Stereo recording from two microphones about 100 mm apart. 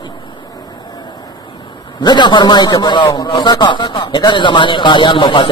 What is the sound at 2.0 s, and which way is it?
A man's voice, 50° left (ahead or behind).